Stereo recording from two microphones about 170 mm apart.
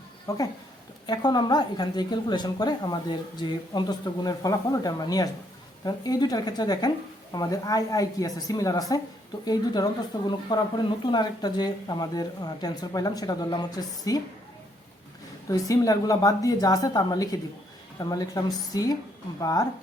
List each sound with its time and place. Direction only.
0.3 s speech: 20° left (ahead or behind)
15.4 s speech: 20° left (ahead or behind)